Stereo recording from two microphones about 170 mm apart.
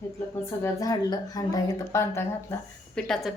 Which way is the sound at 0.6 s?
20° left (ahead or behind).